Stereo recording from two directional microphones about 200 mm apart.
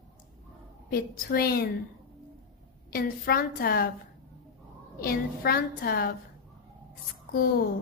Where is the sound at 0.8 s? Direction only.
50° left (ahead or behind).